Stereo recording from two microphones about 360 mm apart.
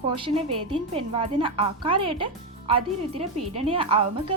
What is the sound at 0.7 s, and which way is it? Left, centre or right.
A woman's voice, centre.